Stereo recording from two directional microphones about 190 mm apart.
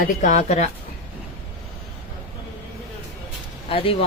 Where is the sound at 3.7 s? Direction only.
30° left (ahead or behind).